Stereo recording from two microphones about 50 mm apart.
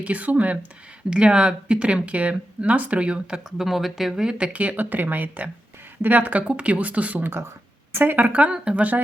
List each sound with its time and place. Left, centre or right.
0.0 s speech: right
1.1 s speech: centre
3.6 s speech: centre
4.5 s speech: right
8.3 s speech: right